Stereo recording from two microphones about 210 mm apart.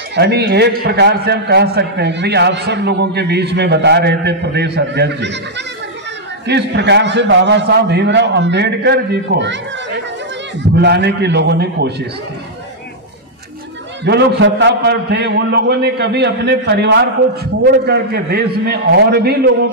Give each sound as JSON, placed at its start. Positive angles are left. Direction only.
{"t": 0.1, "sound": "a man's voice", "side_deg": -50}
{"t": 6.4, "sound": "a man's voice", "side_deg": -55}
{"t": 14.0, "sound": "a man's voice", "side_deg": -55}